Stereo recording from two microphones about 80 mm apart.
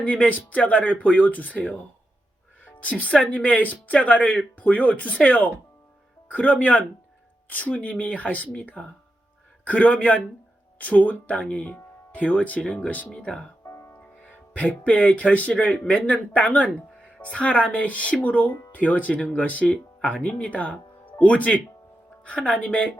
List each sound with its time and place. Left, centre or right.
0.0 s speech: centre
3.0 s speech: centre
9.6 s speech: centre
13.7 s music: left
14.3 s speech: centre